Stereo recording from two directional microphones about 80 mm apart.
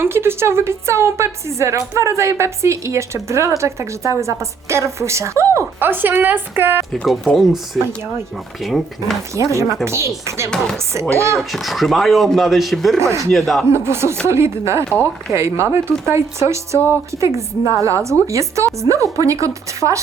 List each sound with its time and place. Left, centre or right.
0.0 s a woman's voice: right
5.8 s a woman's voice: right
6.9 s speech: centre
9.3 s a woman's voice: right
11.3 s speech: centre
13.0 s a woman's voice: right
13.3 s speech: centre
13.7 s a woman's voice: right